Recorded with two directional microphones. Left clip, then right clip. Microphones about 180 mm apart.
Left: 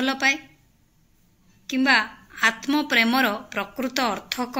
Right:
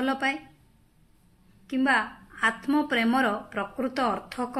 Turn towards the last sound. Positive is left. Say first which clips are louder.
# left 2 dB
turn(degrees=25)  # may be behind; listen again after turning